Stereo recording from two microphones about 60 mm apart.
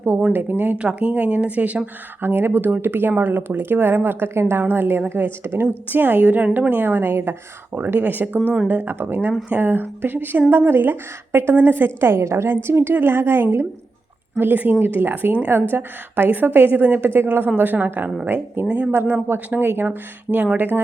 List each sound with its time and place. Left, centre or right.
0.3 s speech: right
2.2 s a woman's voice: right
14.3 s speech: right